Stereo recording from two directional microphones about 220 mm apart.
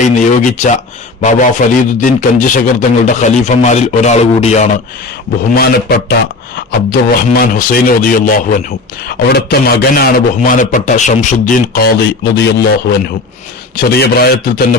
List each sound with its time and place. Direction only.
0.0 s a man's voice: 35° left (ahead or behind)
5.5 s a man's voice: 45° left (ahead or behind)